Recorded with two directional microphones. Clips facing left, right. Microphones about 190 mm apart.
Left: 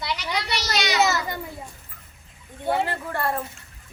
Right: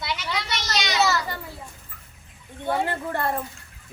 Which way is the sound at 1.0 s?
20° left (ahead or behind).